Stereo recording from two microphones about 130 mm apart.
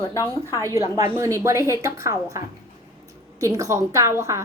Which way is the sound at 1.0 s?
20° right (ahead or behind).